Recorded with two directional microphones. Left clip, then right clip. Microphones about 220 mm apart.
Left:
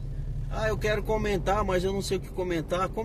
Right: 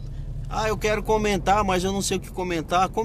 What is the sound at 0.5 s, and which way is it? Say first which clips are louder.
A man's voice: right 4 dB; 10° right (ahead or behind).